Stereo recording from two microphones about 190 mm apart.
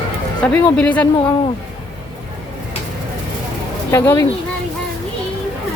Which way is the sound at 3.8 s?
15° left (ahead or behind).